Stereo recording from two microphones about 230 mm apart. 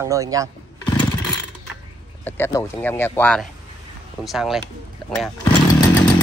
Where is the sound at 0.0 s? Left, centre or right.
Centre.